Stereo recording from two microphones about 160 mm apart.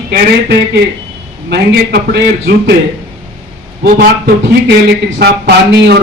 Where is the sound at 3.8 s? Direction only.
65° right (ahead or behind).